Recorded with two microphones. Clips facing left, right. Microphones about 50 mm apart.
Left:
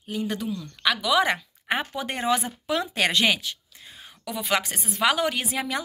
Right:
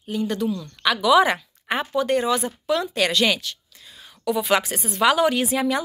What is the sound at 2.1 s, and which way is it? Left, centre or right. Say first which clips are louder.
Speech: right 1 dB; left.